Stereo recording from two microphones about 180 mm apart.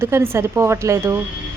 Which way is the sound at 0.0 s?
15° right (ahead or behind).